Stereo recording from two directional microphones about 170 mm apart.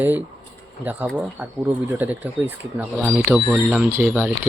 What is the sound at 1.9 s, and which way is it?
Speech, 10° right (ahead or behind).